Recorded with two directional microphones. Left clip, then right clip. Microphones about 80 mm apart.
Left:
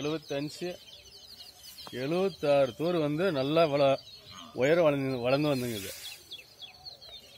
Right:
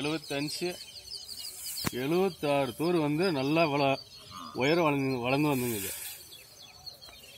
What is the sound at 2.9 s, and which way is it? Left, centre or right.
Speech, left.